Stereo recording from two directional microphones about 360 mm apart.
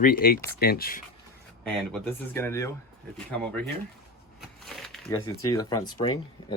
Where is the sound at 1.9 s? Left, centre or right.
Centre.